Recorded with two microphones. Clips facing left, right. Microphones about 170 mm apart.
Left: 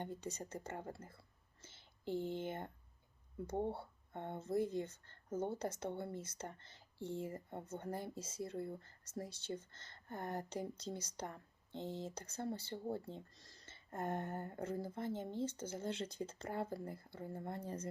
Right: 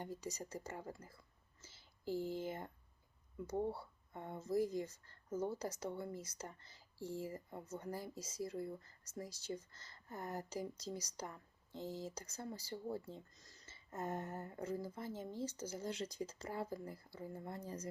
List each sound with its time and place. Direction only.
0.0 s speech: 30° left (ahead or behind)